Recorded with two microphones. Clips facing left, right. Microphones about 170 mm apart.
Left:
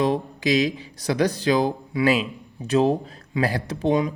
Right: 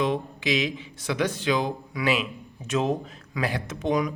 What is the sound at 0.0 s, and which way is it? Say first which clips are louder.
Speech: left 4 dB; 40° left (ahead or behind).